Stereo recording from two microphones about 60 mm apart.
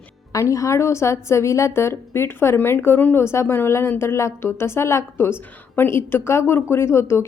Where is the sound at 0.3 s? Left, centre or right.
Left.